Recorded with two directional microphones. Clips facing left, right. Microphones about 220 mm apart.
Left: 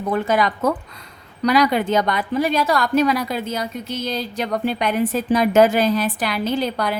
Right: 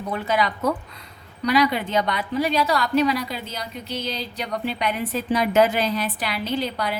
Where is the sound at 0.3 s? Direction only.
50° left (ahead or behind).